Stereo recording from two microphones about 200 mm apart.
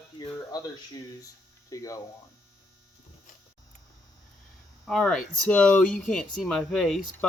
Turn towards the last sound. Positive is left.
turn(degrees=0)  # may be behind; listen again after turning